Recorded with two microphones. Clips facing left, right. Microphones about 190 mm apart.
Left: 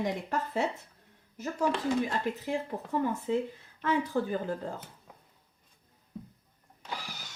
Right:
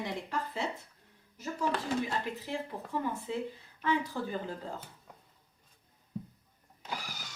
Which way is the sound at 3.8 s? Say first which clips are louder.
Left 3 dB; 45° left (ahead or behind).